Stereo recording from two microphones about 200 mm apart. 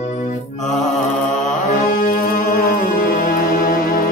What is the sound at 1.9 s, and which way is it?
Music, 45° left (ahead or behind).